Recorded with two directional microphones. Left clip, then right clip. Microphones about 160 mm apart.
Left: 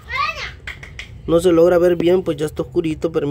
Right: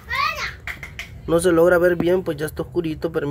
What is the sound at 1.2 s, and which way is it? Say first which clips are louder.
Speech: left 3 dB; 15° left (ahead or behind).